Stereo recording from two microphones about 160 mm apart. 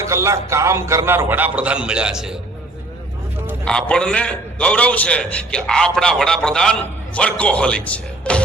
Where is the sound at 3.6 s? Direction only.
5° left (ahead or behind).